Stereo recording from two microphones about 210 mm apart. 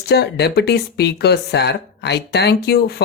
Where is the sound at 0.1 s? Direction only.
50° left (ahead or behind).